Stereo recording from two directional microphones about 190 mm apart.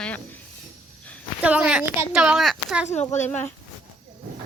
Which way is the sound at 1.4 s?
5° right (ahead or behind).